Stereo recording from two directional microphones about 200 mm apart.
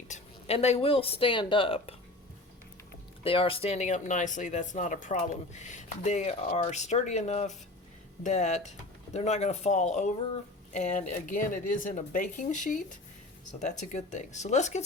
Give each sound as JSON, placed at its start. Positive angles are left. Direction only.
{"t": 0.1, "sound": "speech", "side_deg": 30}
{"t": 3.2, "sound": "speech", "side_deg": 25}